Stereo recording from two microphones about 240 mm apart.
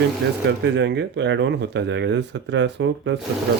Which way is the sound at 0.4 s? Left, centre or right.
Right.